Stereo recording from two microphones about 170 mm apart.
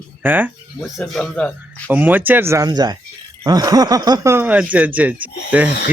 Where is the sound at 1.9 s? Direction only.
10° right (ahead or behind).